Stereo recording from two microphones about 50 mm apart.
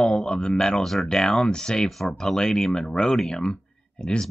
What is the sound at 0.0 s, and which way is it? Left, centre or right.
Speech, left.